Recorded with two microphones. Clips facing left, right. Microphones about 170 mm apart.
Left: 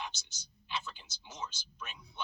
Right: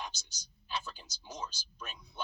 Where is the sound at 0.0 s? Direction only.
40° right (ahead or behind).